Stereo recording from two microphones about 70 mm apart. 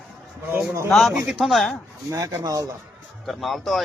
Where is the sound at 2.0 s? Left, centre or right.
Right.